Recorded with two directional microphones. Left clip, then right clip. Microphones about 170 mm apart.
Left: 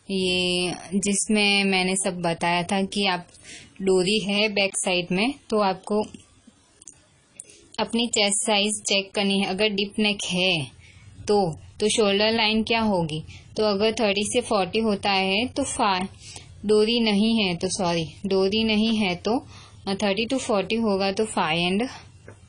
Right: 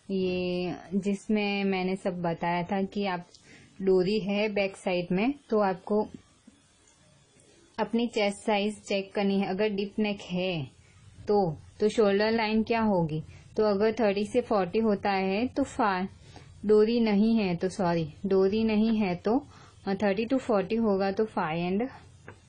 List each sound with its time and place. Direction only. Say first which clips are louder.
0.1 s a woman's voice: left 6 dB; 10° right (ahead or behind)
7.7 s a woman's voice: left 5 dB; 15° right (ahead or behind)
16.6 s a woman's voice: left 3 dB; 15° right (ahead or behind)
21.4 s speech: left 6 dB; centre (ahead or behind)